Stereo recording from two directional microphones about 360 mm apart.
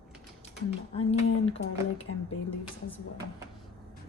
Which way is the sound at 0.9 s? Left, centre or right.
Centre.